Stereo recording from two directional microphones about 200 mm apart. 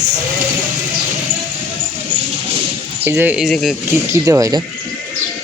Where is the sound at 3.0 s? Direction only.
10° right (ahead or behind).